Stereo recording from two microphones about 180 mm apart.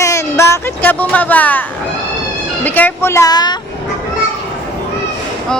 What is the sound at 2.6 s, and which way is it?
Speech, 10° left (ahead or behind).